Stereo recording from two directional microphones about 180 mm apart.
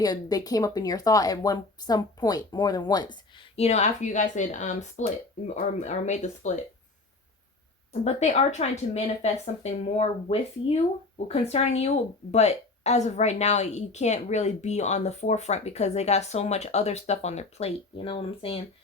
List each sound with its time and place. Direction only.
0.0 s a woman's voice: 20° left (ahead or behind); by 6.6 s 40° left (ahead or behind)
8.0 s a woman's voice: 40° left (ahead or behind)